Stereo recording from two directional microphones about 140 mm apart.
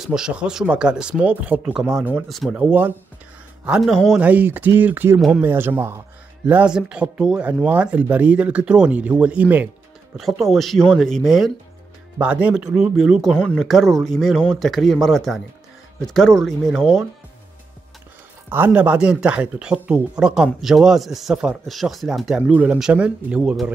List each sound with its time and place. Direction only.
0.0 s speech: 5° right (ahead or behind)
4.2 s speech: 10° right (ahead or behind)
10.1 s speech: centre (ahead or behind)
18.5 s speech: 15° right (ahead or behind)